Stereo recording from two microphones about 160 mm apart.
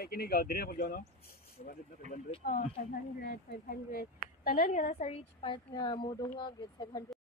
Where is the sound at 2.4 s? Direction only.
65° left (ahead or behind); by 7.0 s 30° left (ahead or behind).